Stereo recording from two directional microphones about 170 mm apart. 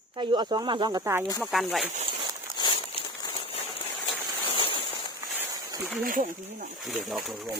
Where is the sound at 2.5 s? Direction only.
30° right (ahead or behind).